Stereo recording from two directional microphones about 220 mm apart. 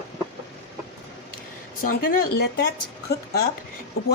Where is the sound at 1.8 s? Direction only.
45° left (ahead or behind).